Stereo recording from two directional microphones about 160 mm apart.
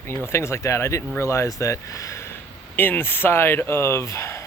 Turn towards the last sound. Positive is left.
turn(degrees=15)  # may be behind; listen again after turning